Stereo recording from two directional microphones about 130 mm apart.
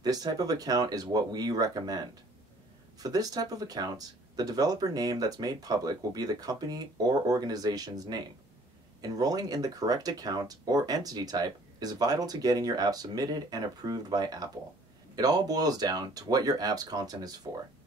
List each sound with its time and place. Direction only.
0.0 s speech: 30° right (ahead or behind)